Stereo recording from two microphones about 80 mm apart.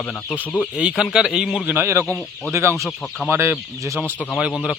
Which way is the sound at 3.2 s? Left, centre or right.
Right.